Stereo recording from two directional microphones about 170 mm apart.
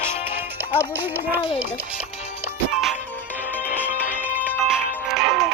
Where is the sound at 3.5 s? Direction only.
10° left (ahead or behind).